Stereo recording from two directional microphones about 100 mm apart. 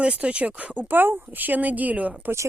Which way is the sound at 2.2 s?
25° right (ahead or behind).